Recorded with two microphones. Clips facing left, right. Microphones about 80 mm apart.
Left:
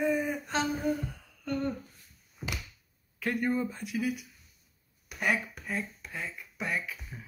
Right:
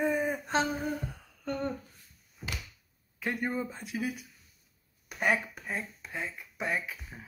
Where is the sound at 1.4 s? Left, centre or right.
Right.